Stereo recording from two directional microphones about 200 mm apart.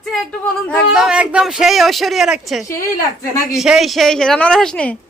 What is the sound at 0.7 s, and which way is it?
Speech, centre (ahead or behind).